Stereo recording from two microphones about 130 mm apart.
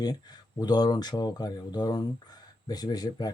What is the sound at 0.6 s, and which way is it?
Speech, 30° left (ahead or behind).